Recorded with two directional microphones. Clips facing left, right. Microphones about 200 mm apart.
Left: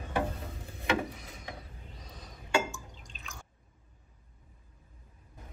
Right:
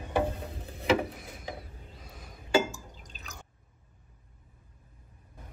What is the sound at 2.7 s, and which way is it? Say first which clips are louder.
Drip: right 1 dB; 35° right (ahead or behind).